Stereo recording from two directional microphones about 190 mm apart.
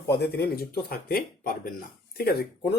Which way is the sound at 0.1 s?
55° left (ahead or behind).